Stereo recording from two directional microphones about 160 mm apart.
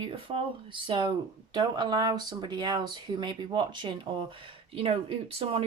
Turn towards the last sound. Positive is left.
turn(degrees=-35)  # may be behind; listen again after turning